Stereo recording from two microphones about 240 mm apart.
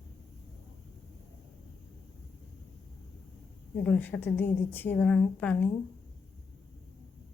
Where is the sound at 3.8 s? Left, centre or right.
Centre.